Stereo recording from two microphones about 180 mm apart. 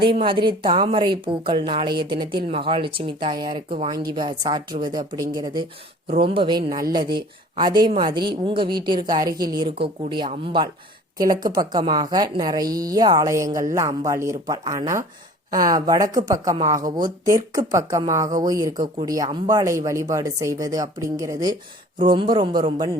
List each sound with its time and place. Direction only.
0.0 s a woman's voice: 30° right (ahead or behind)
6.6 s speech: 55° right (ahead or behind)
6.9 s a woman's voice: 25° right (ahead or behind)